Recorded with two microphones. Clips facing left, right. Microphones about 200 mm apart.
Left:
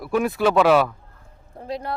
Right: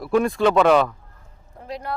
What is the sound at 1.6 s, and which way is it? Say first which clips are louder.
Speech: left 2 dB; 30° left (ahead or behind).